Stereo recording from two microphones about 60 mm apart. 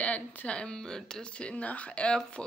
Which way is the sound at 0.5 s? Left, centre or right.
Centre.